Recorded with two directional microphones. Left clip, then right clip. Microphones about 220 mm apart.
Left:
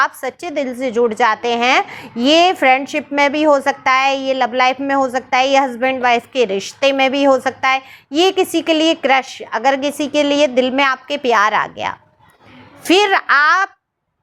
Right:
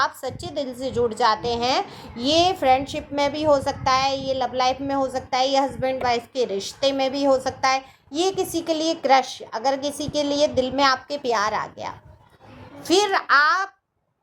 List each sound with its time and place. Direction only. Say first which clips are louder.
0.2 s a woman's voice: left 7 dB; 35° left (ahead or behind)
10.5 s a woman's voice: left 7 dB; 65° left (ahead or behind)
10.8 s a woman's voice: left 4 dB; 40° left (ahead or behind)